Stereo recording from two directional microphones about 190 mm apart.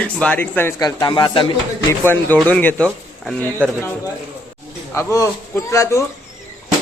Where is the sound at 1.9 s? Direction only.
10° left (ahead or behind).